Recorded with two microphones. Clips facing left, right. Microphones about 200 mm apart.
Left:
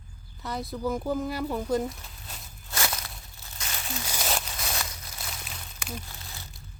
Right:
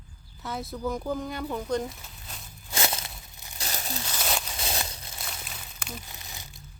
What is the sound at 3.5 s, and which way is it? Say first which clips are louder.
Crumpling: right 2 dB; 40° right (ahead or behind).